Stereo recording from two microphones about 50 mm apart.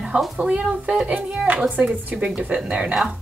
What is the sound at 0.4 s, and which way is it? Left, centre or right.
Speech, right.